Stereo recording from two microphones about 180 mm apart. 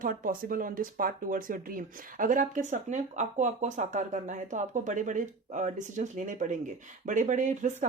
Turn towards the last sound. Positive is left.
turn(degrees=-40)  # may be behind; listen again after turning